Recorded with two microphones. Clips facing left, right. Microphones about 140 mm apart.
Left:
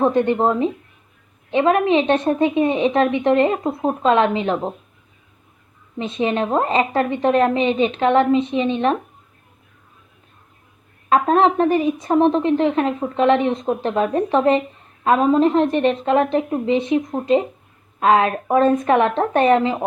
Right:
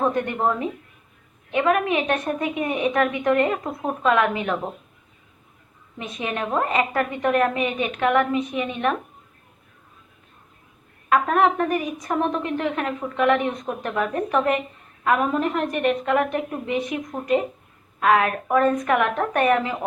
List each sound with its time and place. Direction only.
0.0 s a woman's voice: 25° left (ahead or behind)
6.0 s a woman's voice: 30° left (ahead or behind)
11.1 s a woman's voice: 30° left (ahead or behind)